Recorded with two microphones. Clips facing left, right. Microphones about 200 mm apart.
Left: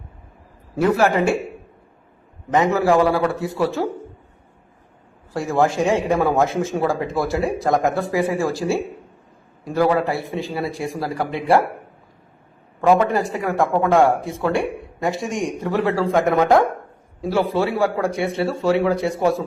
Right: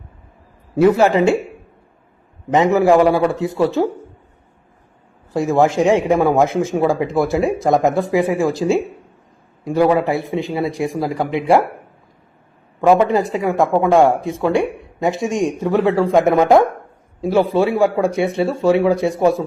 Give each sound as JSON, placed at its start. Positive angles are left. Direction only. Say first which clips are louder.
{"t": 0.8, "sound": "speech", "louder": "right 5 dB", "side_deg": -20}
{"t": 2.5, "sound": "speech", "louder": "right 4 dB", "side_deg": -20}
{"t": 5.3, "sound": "speech", "louder": "right 4 dB", "side_deg": -20}
{"t": 13.0, "sound": "speech", "louder": "right 4 dB", "side_deg": -20}